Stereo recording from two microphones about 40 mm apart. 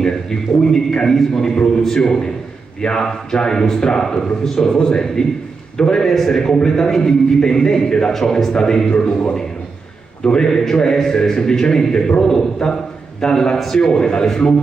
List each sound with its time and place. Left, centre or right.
0.0 s a man's voice: centre